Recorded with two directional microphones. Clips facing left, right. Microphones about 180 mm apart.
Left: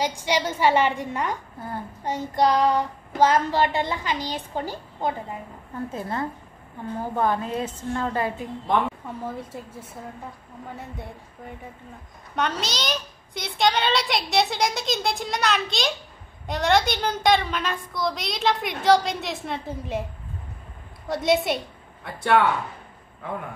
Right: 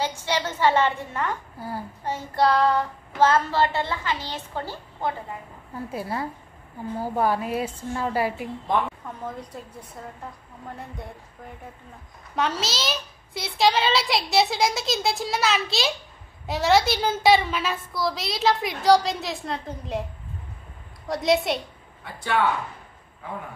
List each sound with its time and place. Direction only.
0.0 s a woman's voice: 15° left (ahead or behind)
1.6 s a woman's voice: 5° right (ahead or behind)
2.0 s a woman's voice: 15° left (ahead or behind)
5.9 s a woman's voice: 10° right (ahead or behind)
12.4 s a woman's voice: centre (ahead or behind)
21.1 s a woman's voice: centre (ahead or behind)
22.0 s speech: 60° left (ahead or behind)